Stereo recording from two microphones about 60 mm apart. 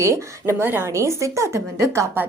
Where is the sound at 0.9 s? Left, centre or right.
Right.